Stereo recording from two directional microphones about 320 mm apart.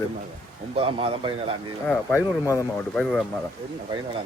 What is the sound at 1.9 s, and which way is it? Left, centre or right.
Speech, centre.